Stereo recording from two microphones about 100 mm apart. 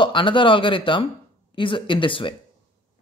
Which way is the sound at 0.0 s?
55° left (ahead or behind).